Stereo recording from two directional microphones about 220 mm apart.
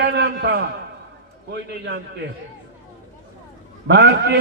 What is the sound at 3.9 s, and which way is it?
Speech, 50° right (ahead or behind).